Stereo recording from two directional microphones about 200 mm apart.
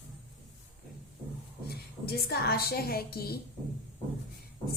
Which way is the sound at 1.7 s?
50° left (ahead or behind).